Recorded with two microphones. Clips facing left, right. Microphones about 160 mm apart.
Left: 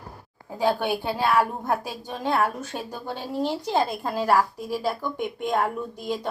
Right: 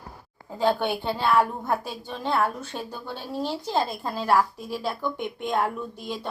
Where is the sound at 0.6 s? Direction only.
10° left (ahead or behind).